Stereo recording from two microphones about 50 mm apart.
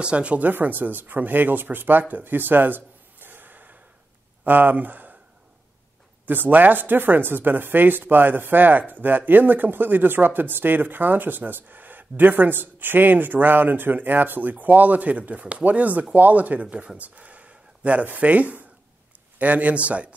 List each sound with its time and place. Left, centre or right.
0.0 s a man's voice: right
0.5 s speech: right
6.2 s a man's voice: right